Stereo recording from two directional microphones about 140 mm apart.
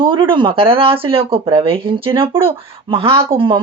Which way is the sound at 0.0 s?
35° right (ahead or behind).